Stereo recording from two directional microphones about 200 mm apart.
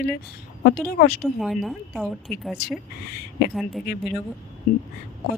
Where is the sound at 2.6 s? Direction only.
50° left (ahead or behind).